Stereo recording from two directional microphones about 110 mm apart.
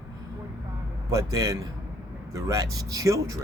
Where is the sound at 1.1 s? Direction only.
30° right (ahead or behind).